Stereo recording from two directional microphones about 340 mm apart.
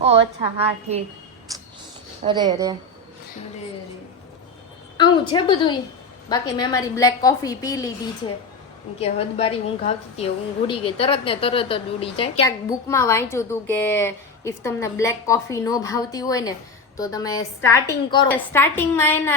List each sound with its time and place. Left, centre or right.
0.9 s a woman's voice: centre
1.5 s a sound: centre
2.2 s a woman's voice: centre
4.9 s a woman's voice: centre
9.0 s a woman's voice: centre